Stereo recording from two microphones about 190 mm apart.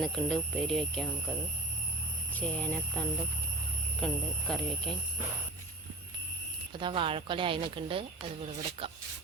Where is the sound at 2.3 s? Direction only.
5° left (ahead or behind).